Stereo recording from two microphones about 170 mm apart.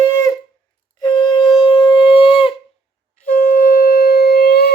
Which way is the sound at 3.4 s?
55° left (ahead or behind).